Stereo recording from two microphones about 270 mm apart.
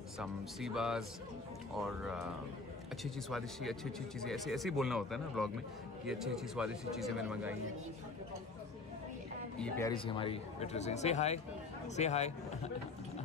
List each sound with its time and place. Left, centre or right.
0.2 s speech: centre
9.6 s speech: centre